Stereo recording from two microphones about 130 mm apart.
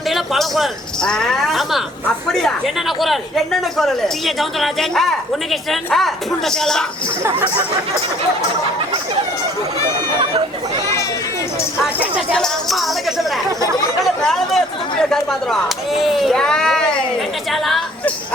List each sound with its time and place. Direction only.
0.1 s speech: centre (ahead or behind)
7.3 s speech: 20° right (ahead or behind)
12.3 s speech: centre (ahead or behind)